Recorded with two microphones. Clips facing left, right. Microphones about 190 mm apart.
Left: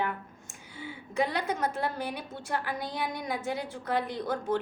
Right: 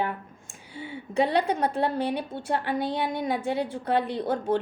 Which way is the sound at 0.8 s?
25° right (ahead or behind).